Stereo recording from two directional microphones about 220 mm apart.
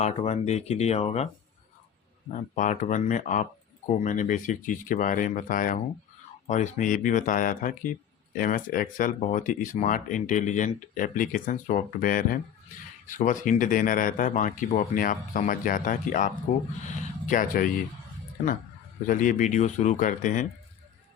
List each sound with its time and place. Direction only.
0.0 s speech: 30° left (ahead or behind)
2.3 s speech: 35° left (ahead or behind)
19.0 s speech: 35° left (ahead or behind)